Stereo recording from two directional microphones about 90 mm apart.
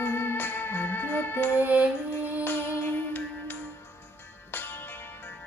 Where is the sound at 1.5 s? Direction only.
15° right (ahead or behind).